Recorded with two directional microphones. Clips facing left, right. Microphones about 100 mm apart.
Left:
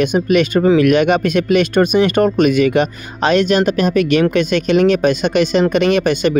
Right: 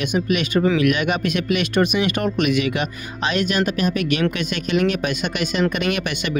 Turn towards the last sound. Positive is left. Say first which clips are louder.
# left 9 dB
turn(degrees=45)  # may be behind; listen again after turning